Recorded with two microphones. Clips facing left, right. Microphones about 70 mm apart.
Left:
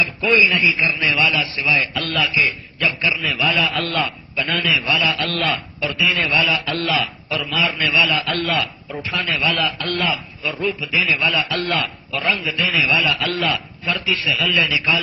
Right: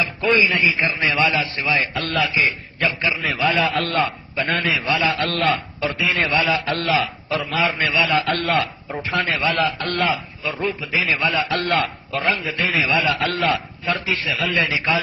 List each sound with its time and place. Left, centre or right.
0.0 s a man's voice: right
8.1 s a man's voice: right
12.6 s a man's voice: right